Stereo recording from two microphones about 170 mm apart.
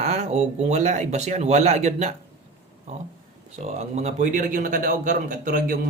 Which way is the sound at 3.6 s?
40° right (ahead or behind).